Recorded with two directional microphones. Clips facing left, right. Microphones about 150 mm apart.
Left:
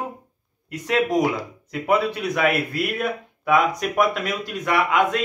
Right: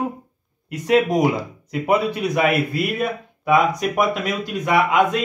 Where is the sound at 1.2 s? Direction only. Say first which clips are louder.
Right 3 dB; 15° right (ahead or behind).